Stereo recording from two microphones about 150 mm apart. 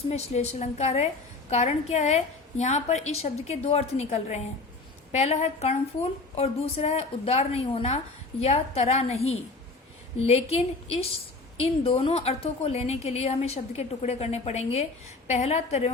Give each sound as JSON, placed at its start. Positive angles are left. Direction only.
{"t": 0.1, "sound": "a woman's voice", "side_deg": 45}
{"t": 10.2, "sound": "a woman's voice", "side_deg": 45}